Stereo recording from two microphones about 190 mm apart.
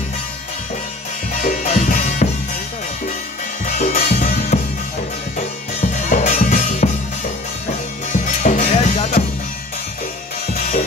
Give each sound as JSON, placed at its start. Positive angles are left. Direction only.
{"t": 1.4, "sound": "music", "side_deg": 40}
{"t": 3.6, "sound": "music", "side_deg": 40}
{"t": 5.8, "sound": "music", "side_deg": 40}
{"t": 8.1, "sound": "music", "side_deg": 40}